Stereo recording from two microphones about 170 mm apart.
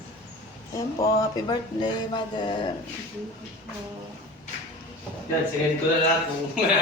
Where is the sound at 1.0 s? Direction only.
25° left (ahead or behind).